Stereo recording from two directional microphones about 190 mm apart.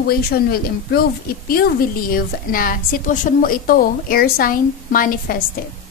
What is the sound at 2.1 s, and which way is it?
A woman's voice, 50° left (ahead or behind).